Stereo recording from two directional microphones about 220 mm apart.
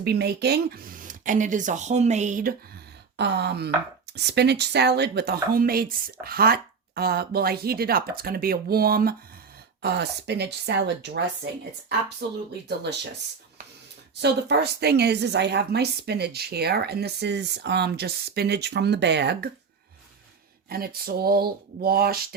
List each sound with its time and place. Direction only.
0.0 s speech: 45° right (ahead or behind)
3.2 s a woman's voice: 50° right (ahead or behind)
12.2 s a woman's voice: 50° right (ahead or behind)
14.2 s a woman's voice: 50° right (ahead or behind)
20.7 s a woman's voice: 45° right (ahead or behind)